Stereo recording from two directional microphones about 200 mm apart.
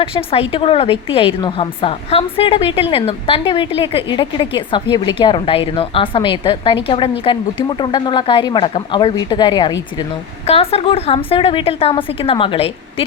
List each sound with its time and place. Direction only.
0.0 s a woman's voice: 30° left (ahead or behind)